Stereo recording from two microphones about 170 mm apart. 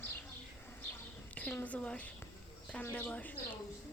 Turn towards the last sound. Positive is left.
turn(degrees=10)  # may be behind; listen again after turning